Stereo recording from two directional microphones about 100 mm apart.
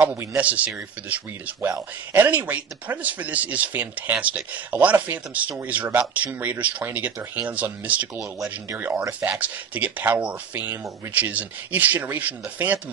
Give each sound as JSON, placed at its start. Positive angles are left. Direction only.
{"t": 0.4, "sound": "speech", "side_deg": -15}